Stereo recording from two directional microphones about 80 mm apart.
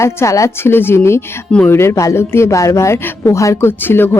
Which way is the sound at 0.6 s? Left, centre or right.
Left.